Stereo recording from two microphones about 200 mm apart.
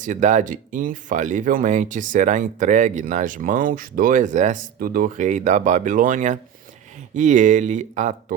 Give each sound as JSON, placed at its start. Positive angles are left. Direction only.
{"t": 0.0, "sound": "speech", "side_deg": -40}